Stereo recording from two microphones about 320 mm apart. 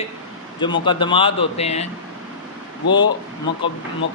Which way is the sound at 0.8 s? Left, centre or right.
Centre.